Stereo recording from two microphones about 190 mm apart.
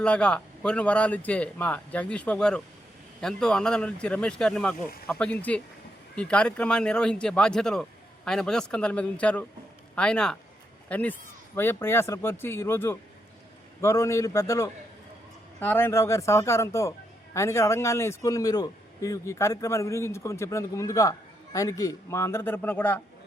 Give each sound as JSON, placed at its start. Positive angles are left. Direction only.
{"t": 0.0, "sound": "a man's voice", "side_deg": 5}